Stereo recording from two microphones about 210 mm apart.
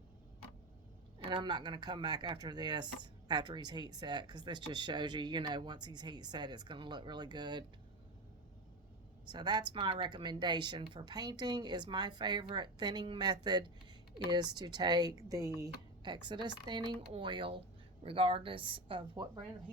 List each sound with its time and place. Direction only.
1.2 s speech: 25° right (ahead or behind)
9.2 s speech: 20° right (ahead or behind)